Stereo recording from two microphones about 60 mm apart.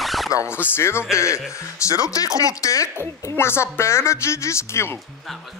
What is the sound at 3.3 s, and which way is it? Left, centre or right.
A woman's voice, left.